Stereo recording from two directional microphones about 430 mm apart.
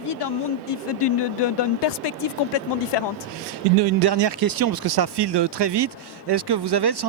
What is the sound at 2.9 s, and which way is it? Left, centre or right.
Speech, left.